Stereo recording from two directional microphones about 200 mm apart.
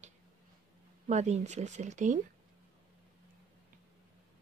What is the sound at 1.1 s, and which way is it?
Speech, 35° right (ahead or behind).